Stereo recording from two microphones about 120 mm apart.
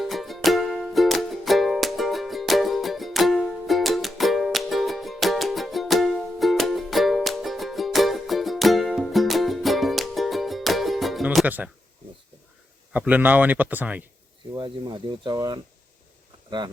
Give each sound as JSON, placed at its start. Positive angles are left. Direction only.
{"t": 0.0, "sound": "music", "side_deg": 0}
{"t": 11.4, "sound": "speech", "side_deg": -15}
{"t": 12.9, "sound": "speech", "side_deg": -15}
{"t": 14.5, "sound": "speech", "side_deg": -40}